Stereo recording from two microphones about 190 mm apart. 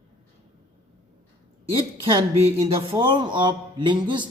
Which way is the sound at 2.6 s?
30° right (ahead or behind).